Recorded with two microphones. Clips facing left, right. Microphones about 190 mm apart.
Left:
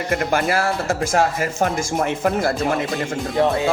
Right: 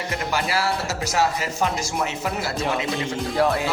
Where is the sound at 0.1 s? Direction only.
50° left (ahead or behind).